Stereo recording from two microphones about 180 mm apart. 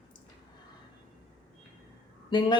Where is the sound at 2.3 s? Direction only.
25° left (ahead or behind).